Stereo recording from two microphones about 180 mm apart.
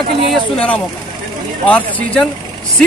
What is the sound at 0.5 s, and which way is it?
Speech, 10° left (ahead or behind).